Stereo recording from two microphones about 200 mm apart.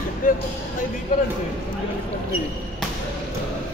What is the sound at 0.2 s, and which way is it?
Speech, 40° left (ahead or behind).